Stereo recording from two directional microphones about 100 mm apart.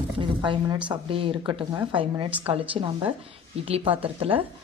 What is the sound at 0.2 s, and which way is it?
Speech, 50° right (ahead or behind).